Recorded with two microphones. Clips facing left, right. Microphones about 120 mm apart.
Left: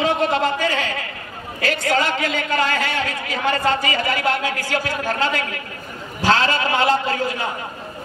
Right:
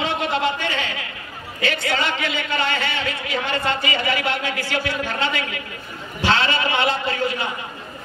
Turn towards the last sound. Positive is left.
turn(degrees=40)  # may be behind; listen again after turning